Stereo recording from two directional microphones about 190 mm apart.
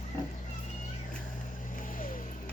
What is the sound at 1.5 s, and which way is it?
Vehicle, 45° left (ahead or behind).